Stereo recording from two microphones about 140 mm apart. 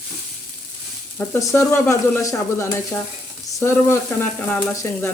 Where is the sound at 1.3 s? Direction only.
20° left (ahead or behind).